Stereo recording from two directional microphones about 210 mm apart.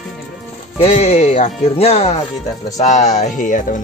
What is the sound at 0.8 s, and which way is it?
Speech, 30° left (ahead or behind).